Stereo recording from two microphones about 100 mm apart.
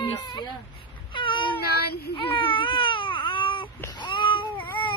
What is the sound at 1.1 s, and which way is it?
Baby cry, 55° left (ahead or behind).